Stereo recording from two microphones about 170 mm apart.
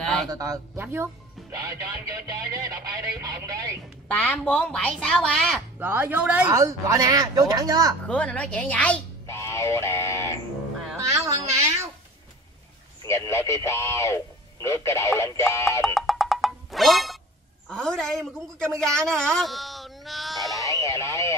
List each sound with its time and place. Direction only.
0.0 s a sound: centre (ahead or behind)
0.3 s a woman's voice: 20° right (ahead or behind)
4.1 s a woman's voice: 5° left (ahead or behind)
5.8 s speech: 10° right (ahead or behind)
6.4 s a woman's voice: 20° right (ahead or behind)
8.1 s speech: 5° left (ahead or behind)
9.3 s a sound: 15° left (ahead or behind)
11.1 s a sound: 15° right (ahead or behind)
13.0 s speech: 15° left (ahead or behind)
15.8 s music: centre (ahead or behind)
17.6 s a man's voice: 5° left (ahead or behind)
20.5 s a sound: 20° left (ahead or behind)